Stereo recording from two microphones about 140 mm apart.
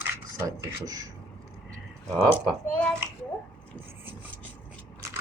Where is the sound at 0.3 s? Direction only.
25° right (ahead or behind).